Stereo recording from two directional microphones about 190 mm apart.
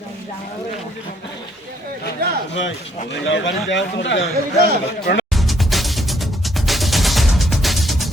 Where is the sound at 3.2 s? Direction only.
70° left (ahead or behind).